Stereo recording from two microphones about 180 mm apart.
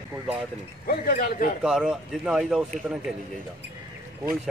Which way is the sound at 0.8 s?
55° left (ahead or behind).